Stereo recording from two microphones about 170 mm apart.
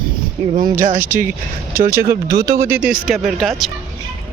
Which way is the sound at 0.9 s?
10° right (ahead or behind).